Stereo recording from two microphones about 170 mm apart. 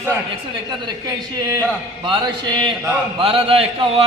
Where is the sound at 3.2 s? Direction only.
35° right (ahead or behind).